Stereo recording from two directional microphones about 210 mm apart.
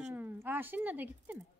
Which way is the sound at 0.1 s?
10° right (ahead or behind).